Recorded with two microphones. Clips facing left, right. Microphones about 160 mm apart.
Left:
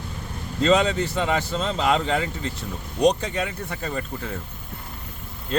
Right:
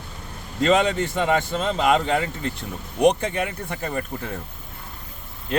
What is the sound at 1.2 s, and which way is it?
Speech, 10° right (ahead or behind).